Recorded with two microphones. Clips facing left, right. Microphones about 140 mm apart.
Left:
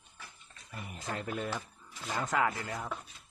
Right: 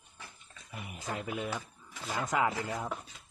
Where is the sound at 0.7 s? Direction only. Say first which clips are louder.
Even; 10° right (ahead or behind).